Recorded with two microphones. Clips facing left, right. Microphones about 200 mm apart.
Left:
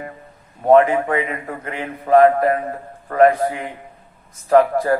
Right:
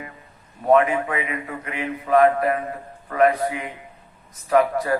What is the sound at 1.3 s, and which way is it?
A man's voice, 45° left (ahead or behind).